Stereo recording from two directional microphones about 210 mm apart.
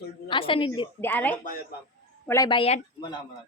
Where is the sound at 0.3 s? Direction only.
25° left (ahead or behind).